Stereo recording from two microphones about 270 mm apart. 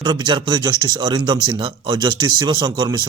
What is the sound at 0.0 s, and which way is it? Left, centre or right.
Speech, centre.